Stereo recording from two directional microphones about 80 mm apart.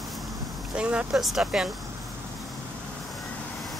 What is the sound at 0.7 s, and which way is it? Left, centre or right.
Speech, centre.